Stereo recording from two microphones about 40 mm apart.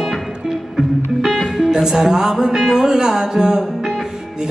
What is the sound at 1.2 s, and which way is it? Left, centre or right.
Music, centre.